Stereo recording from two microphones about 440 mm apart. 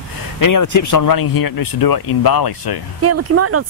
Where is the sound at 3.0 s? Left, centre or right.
Right.